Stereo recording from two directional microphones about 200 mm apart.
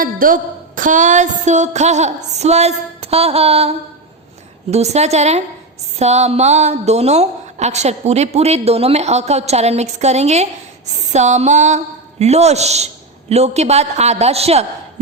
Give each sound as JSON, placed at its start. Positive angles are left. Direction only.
{"t": 0.0, "sound": "a woman's voice", "side_deg": -45}